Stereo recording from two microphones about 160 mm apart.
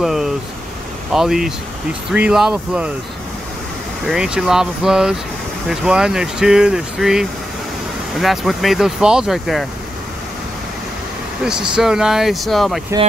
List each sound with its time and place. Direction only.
0.0 s a sound: centre (ahead or behind)
1.1 s speech: centre (ahead or behind)
4.0 s speech: 5° right (ahead or behind)
11.7 s speech: 5° right (ahead or behind)